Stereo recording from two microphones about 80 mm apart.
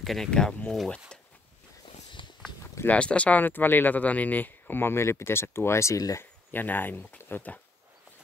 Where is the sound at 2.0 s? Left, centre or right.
Left.